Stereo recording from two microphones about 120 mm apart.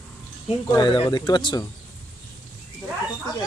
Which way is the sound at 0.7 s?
35° left (ahead or behind).